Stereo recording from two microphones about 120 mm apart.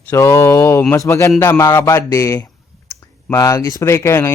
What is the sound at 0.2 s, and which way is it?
Speech, 25° left (ahead or behind).